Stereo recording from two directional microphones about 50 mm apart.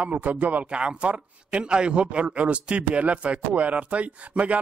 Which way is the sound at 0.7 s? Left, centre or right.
Right.